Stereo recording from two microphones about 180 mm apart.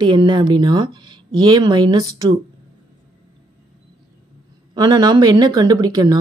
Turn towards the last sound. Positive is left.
turn(degrees=-20)  # may be behind; listen again after turning